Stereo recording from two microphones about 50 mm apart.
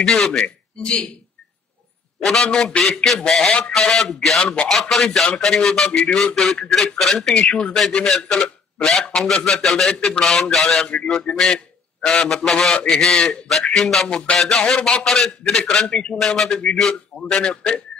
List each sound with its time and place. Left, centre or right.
0.0 s a man's voice: centre
2.2 s a man's voice: centre
7.3 s a man's voice: centre
14.0 s a sound: centre
14.8 s a man's voice: centre
15.0 s a man's voice: centre